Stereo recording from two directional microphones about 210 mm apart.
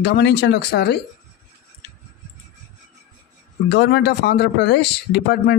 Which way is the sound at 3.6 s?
50° left (ahead or behind).